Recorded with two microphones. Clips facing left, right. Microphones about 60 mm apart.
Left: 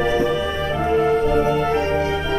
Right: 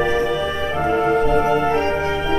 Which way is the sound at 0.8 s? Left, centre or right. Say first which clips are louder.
Even; centre.